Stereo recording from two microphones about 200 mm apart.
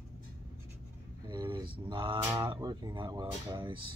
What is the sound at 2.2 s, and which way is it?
Speech, 20° right (ahead or behind).